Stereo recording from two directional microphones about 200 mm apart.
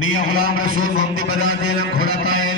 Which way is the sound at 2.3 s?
90° left.